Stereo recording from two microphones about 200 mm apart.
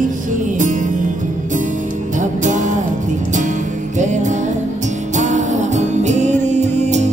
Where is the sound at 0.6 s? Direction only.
40° right (ahead or behind).